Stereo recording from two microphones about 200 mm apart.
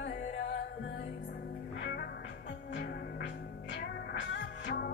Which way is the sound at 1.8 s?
55° left (ahead or behind).